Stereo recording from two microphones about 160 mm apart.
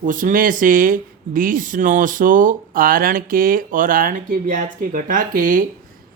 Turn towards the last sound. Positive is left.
turn(degrees=-60)  # may be behind; listen again after turning